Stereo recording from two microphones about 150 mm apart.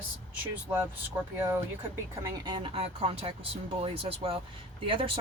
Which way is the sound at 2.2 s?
30° right (ahead or behind).